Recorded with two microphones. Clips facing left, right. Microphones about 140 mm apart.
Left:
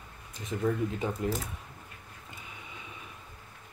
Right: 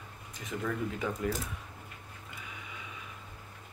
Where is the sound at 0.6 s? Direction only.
25° left (ahead or behind).